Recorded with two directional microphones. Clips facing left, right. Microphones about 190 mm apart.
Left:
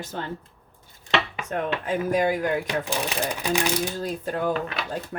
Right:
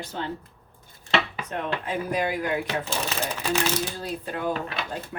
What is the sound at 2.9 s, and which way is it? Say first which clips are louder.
Speech: left 2 dB; 15° left (ahead or behind).